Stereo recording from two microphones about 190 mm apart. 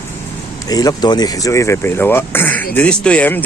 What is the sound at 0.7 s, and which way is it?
Speech, 20° left (ahead or behind).